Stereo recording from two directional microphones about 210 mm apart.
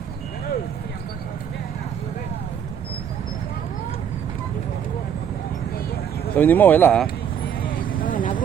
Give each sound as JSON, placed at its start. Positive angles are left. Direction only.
{"t": 6.3, "sound": "speech", "side_deg": 10}
{"t": 7.7, "sound": "vehicle", "side_deg": 40}